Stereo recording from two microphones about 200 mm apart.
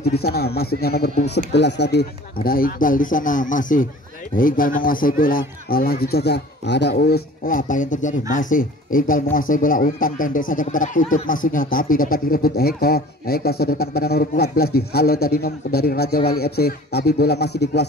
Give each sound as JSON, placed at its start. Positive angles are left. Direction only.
{"t": 0.0, "sound": "speech", "side_deg": 50}
{"t": 2.4, "sound": "speech", "side_deg": 45}
{"t": 7.4, "sound": "speech", "side_deg": 40}